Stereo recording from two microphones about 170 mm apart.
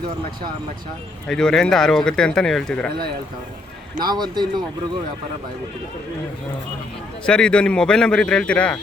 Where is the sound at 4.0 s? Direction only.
25° right (ahead or behind).